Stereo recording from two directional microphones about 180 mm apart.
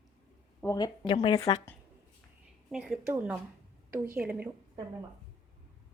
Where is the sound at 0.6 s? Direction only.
20° left (ahead or behind).